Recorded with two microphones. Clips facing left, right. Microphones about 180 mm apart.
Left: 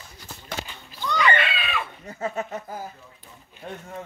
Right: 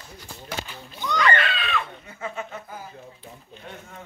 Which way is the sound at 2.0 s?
40° left (ahead or behind).